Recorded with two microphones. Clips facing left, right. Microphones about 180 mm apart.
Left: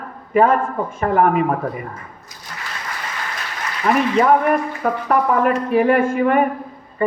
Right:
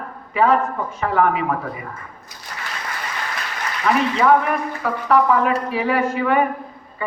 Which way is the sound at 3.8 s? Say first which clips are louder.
Left 2 dB; 50° left (ahead or behind).